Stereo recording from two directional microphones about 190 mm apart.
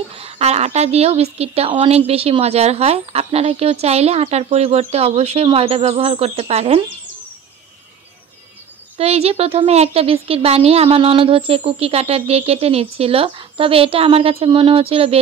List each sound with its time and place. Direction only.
0.1 s speech: 30° right (ahead or behind)
8.9 s speech: 30° right (ahead or behind)